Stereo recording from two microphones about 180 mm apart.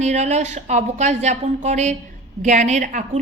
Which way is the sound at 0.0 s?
40° right (ahead or behind).